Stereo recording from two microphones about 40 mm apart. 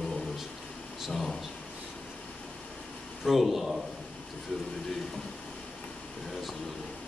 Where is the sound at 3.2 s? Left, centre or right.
Centre.